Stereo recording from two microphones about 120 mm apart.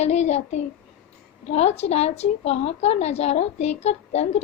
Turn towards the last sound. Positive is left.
turn(degrees=60)  # may be behind; listen again after turning